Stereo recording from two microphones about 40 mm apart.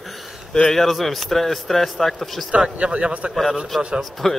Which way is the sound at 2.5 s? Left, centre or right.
Right.